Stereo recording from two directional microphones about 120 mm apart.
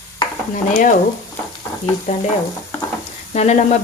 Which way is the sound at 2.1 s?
90° left.